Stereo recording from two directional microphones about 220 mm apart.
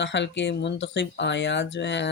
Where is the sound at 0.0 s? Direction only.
55° left (ahead or behind).